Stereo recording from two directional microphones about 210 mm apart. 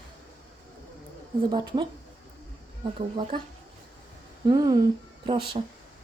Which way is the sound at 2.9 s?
25° right (ahead or behind).